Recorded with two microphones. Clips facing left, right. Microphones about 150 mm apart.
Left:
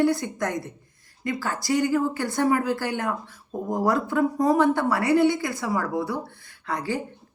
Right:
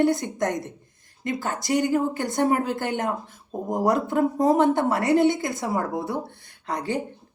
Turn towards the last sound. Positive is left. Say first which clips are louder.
# right 1 dB
turn(degrees=-20)  # may be behind; listen again after turning